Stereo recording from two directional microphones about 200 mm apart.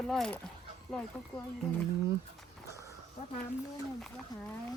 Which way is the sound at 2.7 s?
15° right (ahead or behind).